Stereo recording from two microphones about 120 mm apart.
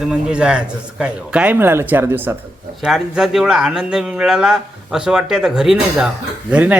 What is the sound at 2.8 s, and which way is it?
A man's voice, 5° right (ahead or behind).